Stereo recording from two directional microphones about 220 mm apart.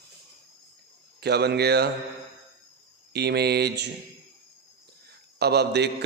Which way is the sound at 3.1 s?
50° right (ahead or behind).